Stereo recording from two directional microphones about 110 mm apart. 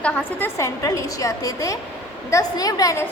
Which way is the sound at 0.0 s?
15° left (ahead or behind).